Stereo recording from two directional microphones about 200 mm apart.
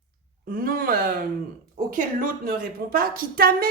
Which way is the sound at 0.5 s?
45° right (ahead or behind).